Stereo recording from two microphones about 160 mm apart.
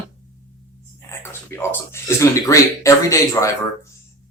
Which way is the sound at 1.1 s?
15° left (ahead or behind).